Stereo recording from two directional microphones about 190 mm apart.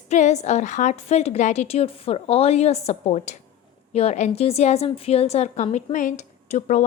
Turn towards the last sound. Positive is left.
turn(degrees=40)  # may be behind; listen again after turning